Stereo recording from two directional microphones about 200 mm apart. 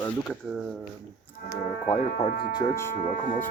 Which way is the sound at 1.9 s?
35° left (ahead or behind).